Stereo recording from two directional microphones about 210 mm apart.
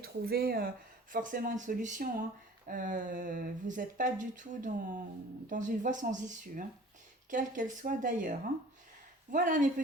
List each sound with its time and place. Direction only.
0.0 s speech: 45° right (ahead or behind)